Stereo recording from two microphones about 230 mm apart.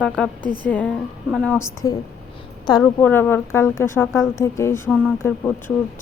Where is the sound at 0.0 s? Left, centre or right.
Centre.